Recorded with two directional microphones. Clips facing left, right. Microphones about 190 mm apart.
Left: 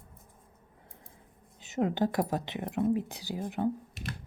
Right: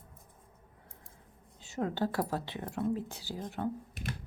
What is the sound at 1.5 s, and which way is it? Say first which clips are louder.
Speech: left 5 dB; 20° left (ahead or behind).